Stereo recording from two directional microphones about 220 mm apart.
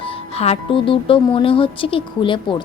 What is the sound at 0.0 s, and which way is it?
Speech, 25° left (ahead or behind).